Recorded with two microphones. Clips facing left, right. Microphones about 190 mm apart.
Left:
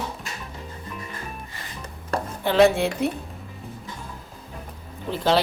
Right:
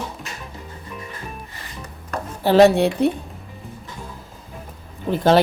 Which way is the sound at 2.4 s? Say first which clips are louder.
Right 5 dB; 35° right (ahead or behind).